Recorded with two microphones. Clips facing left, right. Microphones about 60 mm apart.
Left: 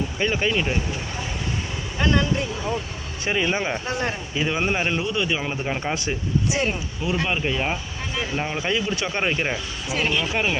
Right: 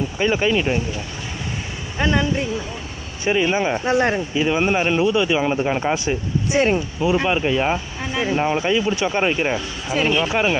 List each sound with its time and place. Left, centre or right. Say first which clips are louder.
0.2 s speech: right 4 dB; centre
2.0 s speech: right 2 dB; centre
3.2 s speech: right 5 dB; centre
3.8 s speech: right 8 dB; right
4.4 s speech: right 3 dB; centre
5.5 s speech: right 6 dB; centre